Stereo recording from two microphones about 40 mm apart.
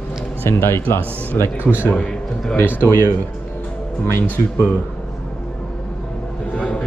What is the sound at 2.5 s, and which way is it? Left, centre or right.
Speech, left.